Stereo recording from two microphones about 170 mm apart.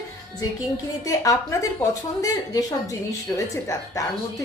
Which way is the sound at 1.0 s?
20° left (ahead or behind).